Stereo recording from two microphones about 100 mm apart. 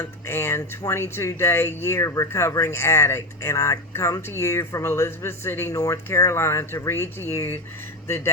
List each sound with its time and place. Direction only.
0.0 s speech: 25° left (ahead or behind)
5.7 s speech: 35° left (ahead or behind)